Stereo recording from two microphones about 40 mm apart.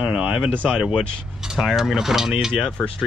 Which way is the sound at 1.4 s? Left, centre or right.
Centre.